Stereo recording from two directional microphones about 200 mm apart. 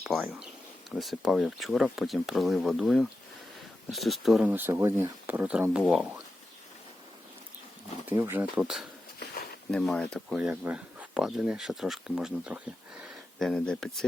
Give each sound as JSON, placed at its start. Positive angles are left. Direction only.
{"t": 0.0, "sound": "speech", "side_deg": 0}
{"t": 8.0, "sound": "speech", "side_deg": -10}
{"t": 9.2, "sound": "a sound", "side_deg": 50}
{"t": 9.7, "sound": "speech", "side_deg": 5}